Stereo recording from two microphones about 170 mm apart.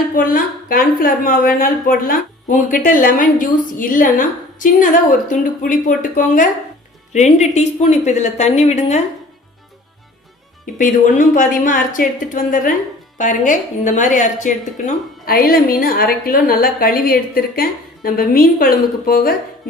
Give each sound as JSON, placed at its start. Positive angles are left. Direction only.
{"t": 0.2, "sound": "a woman's voice", "side_deg": 55}
{"t": 10.8, "sound": "a woman's voice", "side_deg": 50}